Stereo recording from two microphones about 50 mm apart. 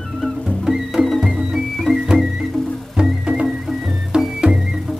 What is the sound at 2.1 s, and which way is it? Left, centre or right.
Music, centre.